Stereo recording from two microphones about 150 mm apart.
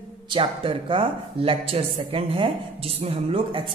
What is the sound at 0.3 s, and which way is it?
Speech, 35° right (ahead or behind).